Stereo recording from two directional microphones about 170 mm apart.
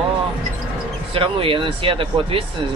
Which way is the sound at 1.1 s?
30° right (ahead or behind).